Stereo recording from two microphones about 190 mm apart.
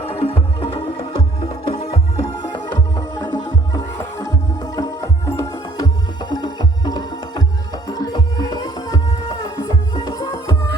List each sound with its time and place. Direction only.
0.0 s music: 30° left (ahead or behind)